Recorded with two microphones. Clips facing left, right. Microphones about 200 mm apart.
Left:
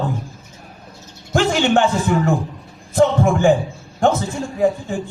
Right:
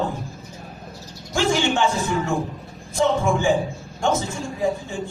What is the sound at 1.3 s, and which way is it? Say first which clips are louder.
Speech: left 5 dB; 60° left (ahead or behind).